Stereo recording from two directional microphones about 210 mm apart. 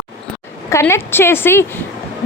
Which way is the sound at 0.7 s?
10° left (ahead or behind).